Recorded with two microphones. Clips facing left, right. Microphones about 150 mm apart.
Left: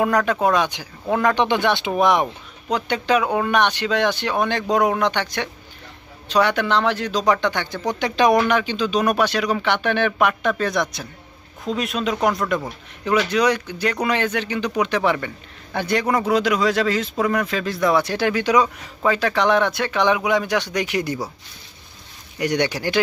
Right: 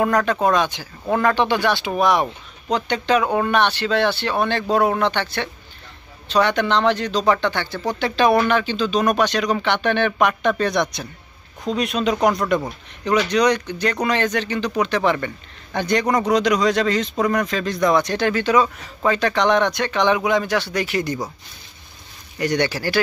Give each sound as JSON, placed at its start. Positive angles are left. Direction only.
{"t": 0.0, "sound": "speech", "side_deg": 10}
{"t": 2.2, "sound": "speech", "side_deg": 10}
{"t": 22.4, "sound": "speech", "side_deg": 15}